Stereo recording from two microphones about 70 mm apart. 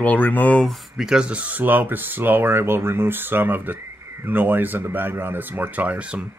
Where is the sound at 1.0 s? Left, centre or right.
Centre.